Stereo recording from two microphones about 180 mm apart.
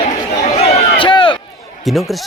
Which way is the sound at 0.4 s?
35° left (ahead or behind).